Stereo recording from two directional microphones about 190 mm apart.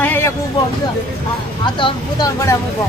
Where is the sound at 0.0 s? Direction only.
10° left (ahead or behind).